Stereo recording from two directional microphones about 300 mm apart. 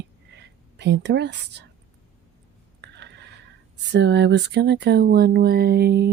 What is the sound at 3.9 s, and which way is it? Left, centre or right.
Speech, right.